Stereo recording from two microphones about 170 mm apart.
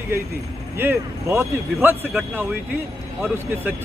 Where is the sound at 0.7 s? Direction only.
15° right (ahead or behind).